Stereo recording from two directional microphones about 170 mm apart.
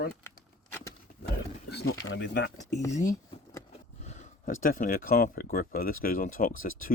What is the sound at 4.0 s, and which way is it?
Speech, 45° left (ahead or behind).